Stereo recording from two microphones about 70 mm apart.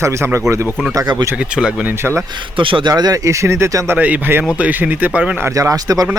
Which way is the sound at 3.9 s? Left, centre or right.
Right.